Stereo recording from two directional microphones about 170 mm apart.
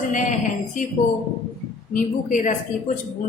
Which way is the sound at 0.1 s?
45° left (ahead or behind).